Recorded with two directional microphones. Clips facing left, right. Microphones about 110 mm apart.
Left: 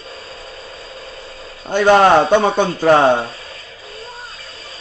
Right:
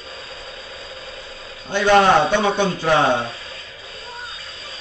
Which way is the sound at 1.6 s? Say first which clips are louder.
Left 3 dB; 45° left (ahead or behind).